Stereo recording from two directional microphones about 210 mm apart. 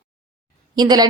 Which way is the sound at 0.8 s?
20° right (ahead or behind).